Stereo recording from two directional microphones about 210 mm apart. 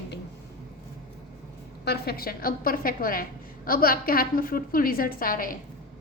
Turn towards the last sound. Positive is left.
turn(degrees=40)  # may be behind; listen again after turning